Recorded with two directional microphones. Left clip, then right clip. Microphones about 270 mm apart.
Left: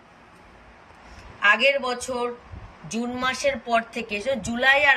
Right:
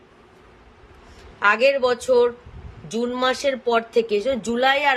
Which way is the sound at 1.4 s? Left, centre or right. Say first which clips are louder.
Right 2 dB; centre.